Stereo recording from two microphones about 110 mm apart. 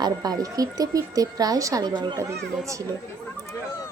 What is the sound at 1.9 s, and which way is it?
Speech, 45° right (ahead or behind).